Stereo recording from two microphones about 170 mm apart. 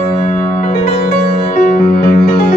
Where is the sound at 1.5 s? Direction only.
55° left (ahead or behind).